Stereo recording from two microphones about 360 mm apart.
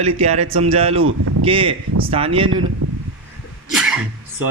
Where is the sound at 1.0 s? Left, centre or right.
Right.